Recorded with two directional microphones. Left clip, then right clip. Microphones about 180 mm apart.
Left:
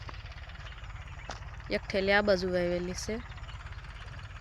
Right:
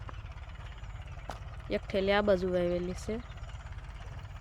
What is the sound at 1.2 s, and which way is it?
Speech, centre (ahead or behind).